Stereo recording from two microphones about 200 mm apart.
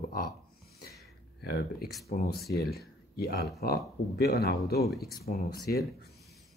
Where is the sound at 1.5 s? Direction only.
50° left (ahead or behind).